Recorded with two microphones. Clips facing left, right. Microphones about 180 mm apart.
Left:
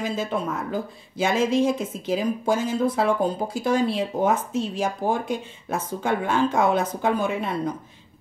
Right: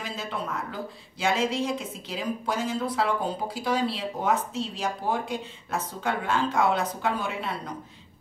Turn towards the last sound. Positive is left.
turn(degrees=45)  # may be behind; listen again after turning